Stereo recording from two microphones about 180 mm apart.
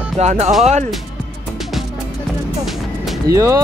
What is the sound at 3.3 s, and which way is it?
Speech, 20° right (ahead or behind).